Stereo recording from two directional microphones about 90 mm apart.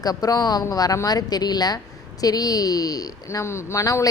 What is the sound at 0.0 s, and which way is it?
Speech, 45° left (ahead or behind).